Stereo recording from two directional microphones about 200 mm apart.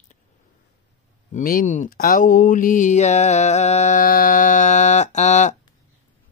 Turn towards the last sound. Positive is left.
turn(degrees=35)  # may be behind; listen again after turning